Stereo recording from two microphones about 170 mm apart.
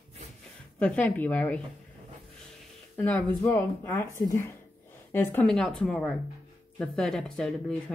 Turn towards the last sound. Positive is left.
turn(degrees=5)  # may be behind; listen again after turning